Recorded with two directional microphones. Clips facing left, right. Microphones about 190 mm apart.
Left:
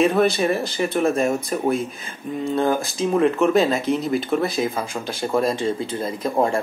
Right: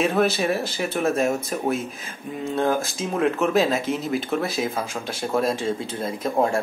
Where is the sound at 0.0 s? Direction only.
Centre (ahead or behind).